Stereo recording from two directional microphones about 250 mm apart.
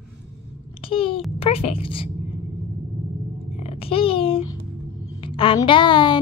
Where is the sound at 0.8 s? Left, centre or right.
Left.